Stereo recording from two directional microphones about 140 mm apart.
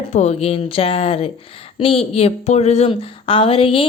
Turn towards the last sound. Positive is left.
turn(degrees=40)  # may be behind; listen again after turning